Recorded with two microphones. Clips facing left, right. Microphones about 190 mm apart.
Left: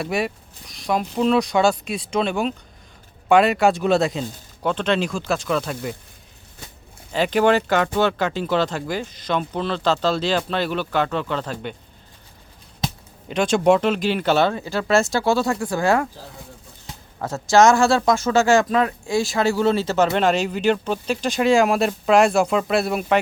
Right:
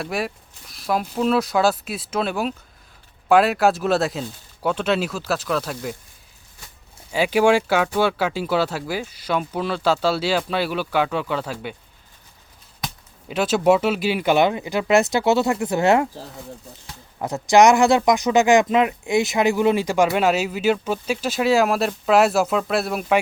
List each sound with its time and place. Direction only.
0.0 s speech: centre (ahead or behind)
7.1 s speech: 10° right (ahead or behind)
13.2 s speech: 5° right (ahead or behind); by 16.0 s 20° right (ahead or behind)
17.2 s speech: 15° right (ahead or behind)